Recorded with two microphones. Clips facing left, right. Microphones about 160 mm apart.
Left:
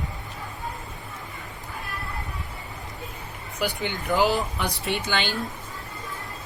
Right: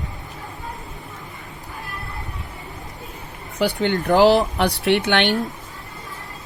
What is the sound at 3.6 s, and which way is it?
Speech, 70° right (ahead or behind).